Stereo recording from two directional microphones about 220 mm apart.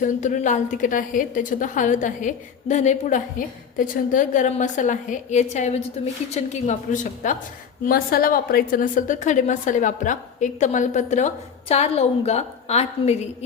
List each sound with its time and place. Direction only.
0.0 s a woman's voice: 35° left (ahead or behind)